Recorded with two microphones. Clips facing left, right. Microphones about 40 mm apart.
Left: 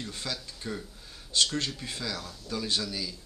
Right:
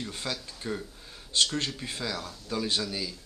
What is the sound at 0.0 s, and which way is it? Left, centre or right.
A man's voice, centre.